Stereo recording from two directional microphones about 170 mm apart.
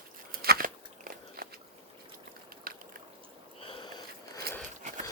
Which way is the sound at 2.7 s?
60° right (ahead or behind).